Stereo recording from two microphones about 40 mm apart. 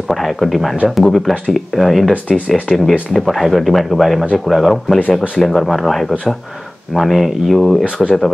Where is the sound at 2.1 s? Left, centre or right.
Left.